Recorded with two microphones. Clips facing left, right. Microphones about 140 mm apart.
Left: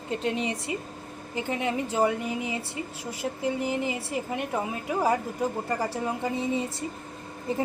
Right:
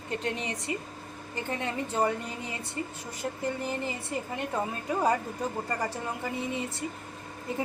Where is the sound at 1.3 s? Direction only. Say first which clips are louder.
Left 4 dB; 10° left (ahead or behind).